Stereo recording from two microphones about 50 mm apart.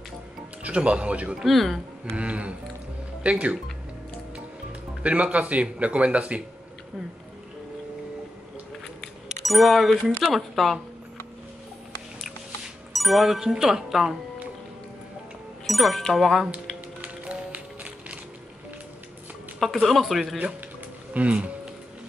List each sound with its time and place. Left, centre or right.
0.7 s speech: right
1.4 s speech: centre
2.1 s speech: right
5.0 s speech: right
9.4 s speech: centre
12.9 s speech: centre
15.6 s speech: centre
17.0 s music: right
19.6 s speech: centre
21.1 s speech: right